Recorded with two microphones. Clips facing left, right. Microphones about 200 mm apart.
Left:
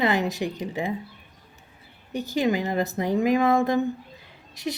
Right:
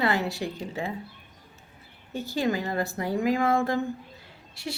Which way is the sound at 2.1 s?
15° left (ahead or behind).